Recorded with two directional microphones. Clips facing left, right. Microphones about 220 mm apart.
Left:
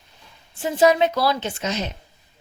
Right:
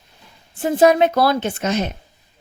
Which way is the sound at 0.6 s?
55° right (ahead or behind).